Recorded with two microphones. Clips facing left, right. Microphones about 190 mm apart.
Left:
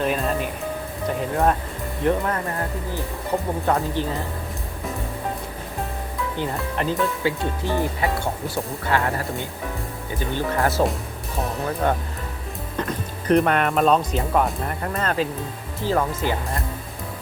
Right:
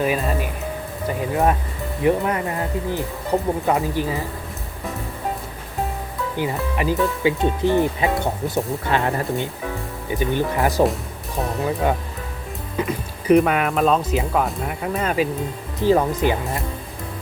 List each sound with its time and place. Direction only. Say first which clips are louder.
0.0 s speech: right 1 dB; 5° right (ahead or behind)
3.7 s speech: even; 10° right (ahead or behind)
6.3 s speech: right 3 dB; 10° right (ahead or behind)